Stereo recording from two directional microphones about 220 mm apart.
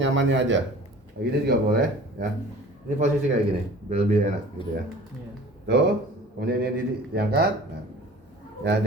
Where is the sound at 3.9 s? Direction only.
30° right (ahead or behind).